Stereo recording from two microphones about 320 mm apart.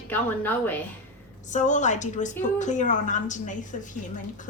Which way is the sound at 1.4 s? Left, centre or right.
Left.